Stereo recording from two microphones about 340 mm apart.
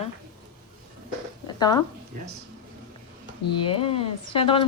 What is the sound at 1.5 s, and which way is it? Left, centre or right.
Zipper, centre.